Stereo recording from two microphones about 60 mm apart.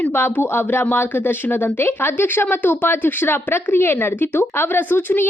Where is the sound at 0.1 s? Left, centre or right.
Left.